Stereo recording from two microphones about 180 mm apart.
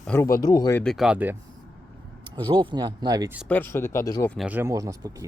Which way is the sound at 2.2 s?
25° right (ahead or behind).